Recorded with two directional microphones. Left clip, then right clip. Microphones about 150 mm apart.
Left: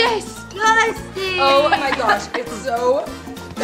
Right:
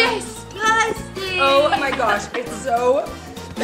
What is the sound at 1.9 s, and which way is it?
Speech, 20° left (ahead or behind).